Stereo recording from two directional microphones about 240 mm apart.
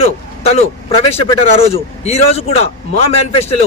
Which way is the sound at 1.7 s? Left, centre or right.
Left.